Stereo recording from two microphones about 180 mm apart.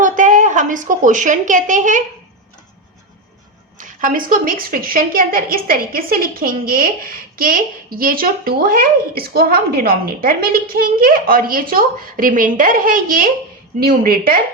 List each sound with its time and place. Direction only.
0.0 s a woman's voice: 45° right (ahead or behind)
3.8 s a woman's voice: 50° right (ahead or behind)